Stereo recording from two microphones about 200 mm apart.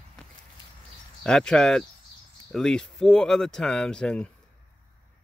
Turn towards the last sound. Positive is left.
turn(degrees=5)  # may be behind; listen again after turning